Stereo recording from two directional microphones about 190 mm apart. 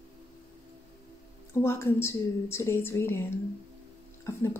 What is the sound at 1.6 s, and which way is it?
A woman's voice, 15° left (ahead or behind).